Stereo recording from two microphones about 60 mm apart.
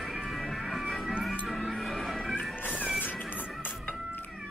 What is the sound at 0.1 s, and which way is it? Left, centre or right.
Music, centre.